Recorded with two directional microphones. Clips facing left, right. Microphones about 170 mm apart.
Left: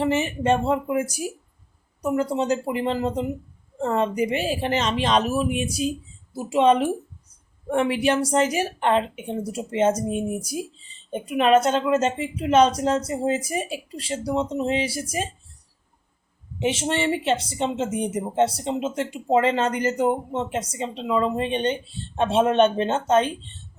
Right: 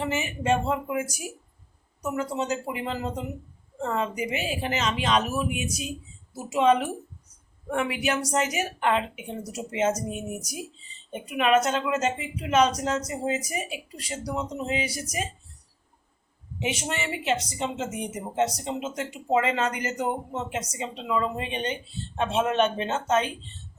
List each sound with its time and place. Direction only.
0.0 s a woman's voice: 35° left (ahead or behind)
16.6 s a woman's voice: 30° left (ahead or behind)